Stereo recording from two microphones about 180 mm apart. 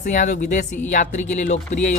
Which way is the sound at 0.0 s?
45° left (ahead or behind).